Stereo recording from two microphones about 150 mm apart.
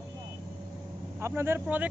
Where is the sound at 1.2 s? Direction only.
15° right (ahead or behind).